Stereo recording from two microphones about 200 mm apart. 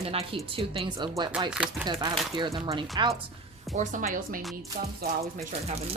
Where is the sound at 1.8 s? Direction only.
20° right (ahead or behind).